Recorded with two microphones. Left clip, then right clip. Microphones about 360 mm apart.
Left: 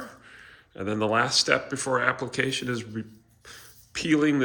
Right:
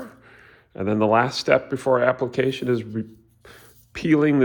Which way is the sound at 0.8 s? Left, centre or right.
Centre.